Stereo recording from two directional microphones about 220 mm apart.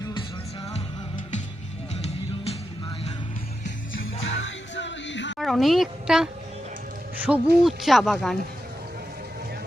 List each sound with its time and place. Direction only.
0.0 s music: 20° left (ahead or behind)
4.3 s music: 55° left (ahead or behind)
5.4 s a woman's voice: centre (ahead or behind)
7.3 s speech: 5° right (ahead or behind)